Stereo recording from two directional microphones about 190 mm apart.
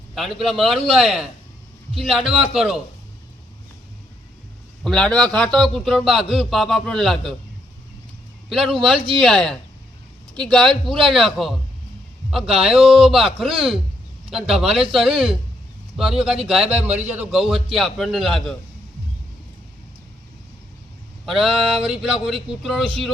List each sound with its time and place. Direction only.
0.1 s speech: centre (ahead or behind)
4.8 s speech: 5° left (ahead or behind)
8.4 s speech: centre (ahead or behind)
21.2 s speech: centre (ahead or behind)
22.8 s speech: 30° right (ahead or behind)